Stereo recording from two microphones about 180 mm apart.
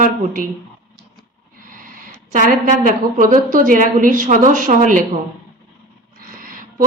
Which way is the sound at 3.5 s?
50° right (ahead or behind).